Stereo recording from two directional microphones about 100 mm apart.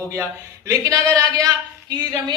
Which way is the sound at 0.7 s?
35° right (ahead or behind).